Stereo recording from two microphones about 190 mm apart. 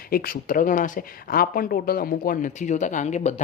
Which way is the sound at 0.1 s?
50° left (ahead or behind).